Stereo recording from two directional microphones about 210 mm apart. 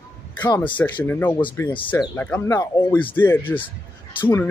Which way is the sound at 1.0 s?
10° left (ahead or behind).